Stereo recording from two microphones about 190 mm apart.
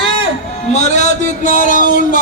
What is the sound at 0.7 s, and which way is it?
A man's voice, 35° left (ahead or behind).